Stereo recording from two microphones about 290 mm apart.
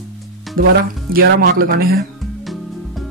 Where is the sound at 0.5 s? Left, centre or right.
Right.